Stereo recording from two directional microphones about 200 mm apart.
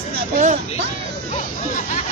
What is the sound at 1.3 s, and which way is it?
Speech, 40° left (ahead or behind).